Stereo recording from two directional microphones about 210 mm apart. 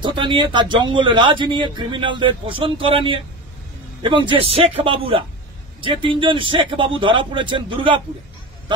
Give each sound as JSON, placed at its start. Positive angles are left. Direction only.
{"t": 0.0, "sound": "speech", "side_deg": -25}